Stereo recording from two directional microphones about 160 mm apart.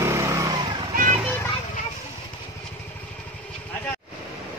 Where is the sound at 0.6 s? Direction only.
30° right (ahead or behind).